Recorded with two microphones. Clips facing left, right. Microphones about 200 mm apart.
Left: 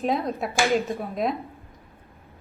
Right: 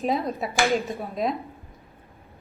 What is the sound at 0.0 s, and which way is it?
A woman's voice, centre (ahead or behind).